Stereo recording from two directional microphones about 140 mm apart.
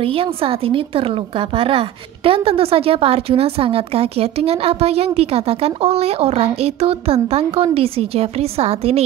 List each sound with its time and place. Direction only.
0.0 s a woman's voice: 40° right (ahead or behind)